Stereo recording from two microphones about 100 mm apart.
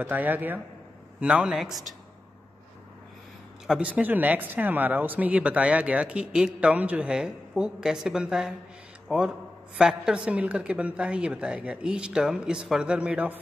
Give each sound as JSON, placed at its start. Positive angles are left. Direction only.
{"t": 0.0, "sound": "speech", "side_deg": -15}
{"t": 3.6, "sound": "speech", "side_deg": -10}